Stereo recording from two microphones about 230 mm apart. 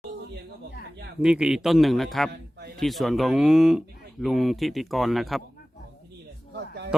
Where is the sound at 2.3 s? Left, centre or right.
Right.